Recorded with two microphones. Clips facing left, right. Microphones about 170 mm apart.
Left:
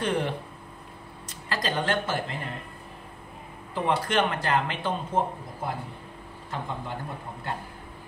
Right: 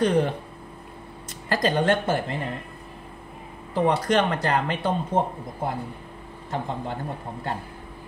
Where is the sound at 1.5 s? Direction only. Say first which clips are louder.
Right 7 dB; 45° right (ahead or behind).